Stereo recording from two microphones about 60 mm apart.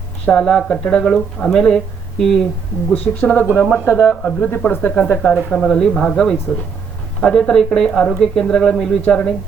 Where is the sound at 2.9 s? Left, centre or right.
Left.